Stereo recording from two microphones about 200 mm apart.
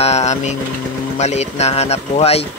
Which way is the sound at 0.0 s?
35° left (ahead or behind).